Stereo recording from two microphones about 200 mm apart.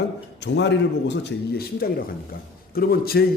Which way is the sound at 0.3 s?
60° left (ahead or behind).